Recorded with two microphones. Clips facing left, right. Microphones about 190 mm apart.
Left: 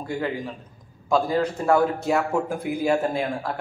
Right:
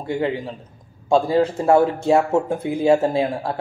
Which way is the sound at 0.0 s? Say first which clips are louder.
Right 5 dB; 25° right (ahead or behind).